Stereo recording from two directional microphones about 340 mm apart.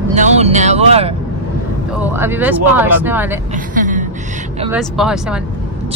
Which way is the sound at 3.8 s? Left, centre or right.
Right.